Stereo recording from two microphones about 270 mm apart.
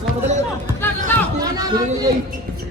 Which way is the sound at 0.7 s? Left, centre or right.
Centre.